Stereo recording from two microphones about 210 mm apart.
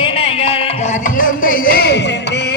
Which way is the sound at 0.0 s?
25° left (ahead or behind).